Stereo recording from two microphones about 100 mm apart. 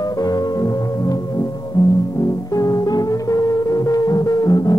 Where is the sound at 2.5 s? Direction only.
35° left (ahead or behind).